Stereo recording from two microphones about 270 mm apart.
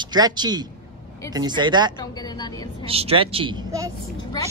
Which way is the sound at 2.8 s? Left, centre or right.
Right.